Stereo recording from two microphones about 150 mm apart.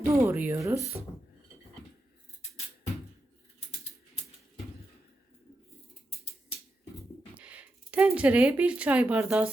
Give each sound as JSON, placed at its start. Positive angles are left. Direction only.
{"t": 0.0, "sound": "speech", "side_deg": -15}
{"t": 7.3, "sound": "speech", "side_deg": -10}